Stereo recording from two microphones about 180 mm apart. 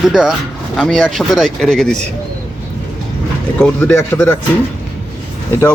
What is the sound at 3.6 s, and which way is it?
Speech, 5° left (ahead or behind).